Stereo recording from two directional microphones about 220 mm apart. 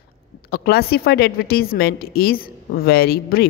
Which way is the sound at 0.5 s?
45° left (ahead or behind).